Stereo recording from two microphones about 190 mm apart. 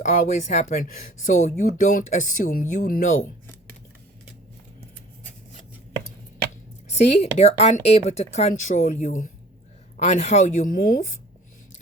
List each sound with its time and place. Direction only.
0.0 s speech: 40° left (ahead or behind)
6.9 s speech: 35° left (ahead or behind)